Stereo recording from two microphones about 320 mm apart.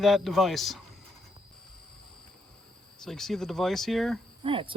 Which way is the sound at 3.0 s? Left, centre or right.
Centre.